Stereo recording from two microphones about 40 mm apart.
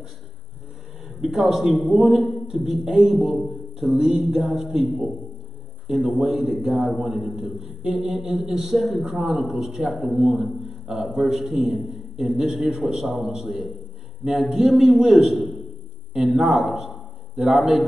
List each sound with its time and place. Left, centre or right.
1.0 s a man's voice: centre
3.3 s speech: centre
3.9 s music: centre
4.2 s a man's voice: centre
6.1 s a man's voice: centre